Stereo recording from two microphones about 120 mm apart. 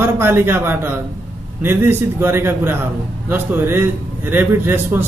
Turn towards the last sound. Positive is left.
turn(degrees=-15)  # may be behind; listen again after turning